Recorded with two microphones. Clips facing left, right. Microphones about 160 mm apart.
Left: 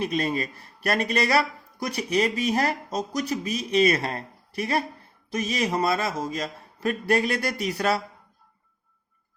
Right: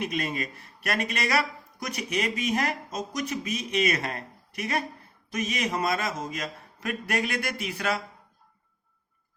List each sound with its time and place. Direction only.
0.0 s speech: 35° left (ahead or behind)